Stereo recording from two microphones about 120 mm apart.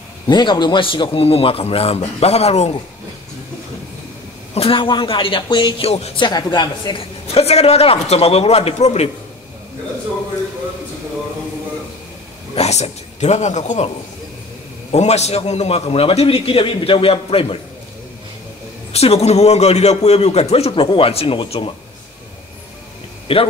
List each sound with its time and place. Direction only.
0.3 s a man's voice: 40° left (ahead or behind); by 2.7 s 60° left (ahead or behind)
4.6 s a man's voice: 45° left (ahead or behind)
5.9 s a man's voice: 60° left (ahead or behind)
6.1 s a woman's voice: 40° left (ahead or behind)
7.3 s a man's voice: 60° left (ahead or behind)
12.5 s speech: 60° left (ahead or behind); by 13.8 s 85° left
14.9 s a man's voice: 65° left (ahead or behind)
18.9 s a man's voice: 60° left (ahead or behind)
23.2 s speech: 50° left (ahead or behind)